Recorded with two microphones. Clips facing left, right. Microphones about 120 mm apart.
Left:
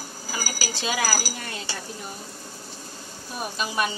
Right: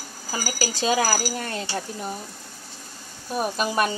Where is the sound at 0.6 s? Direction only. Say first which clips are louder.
Right 7 dB; 40° right (ahead or behind).